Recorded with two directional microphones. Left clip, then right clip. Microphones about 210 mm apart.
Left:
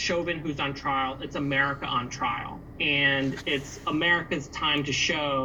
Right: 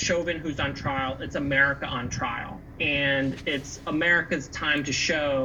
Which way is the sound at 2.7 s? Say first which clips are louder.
Left 1 dB; 40° right (ahead or behind).